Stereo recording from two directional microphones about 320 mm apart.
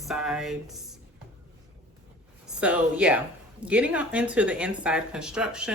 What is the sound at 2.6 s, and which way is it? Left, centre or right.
Speech, centre.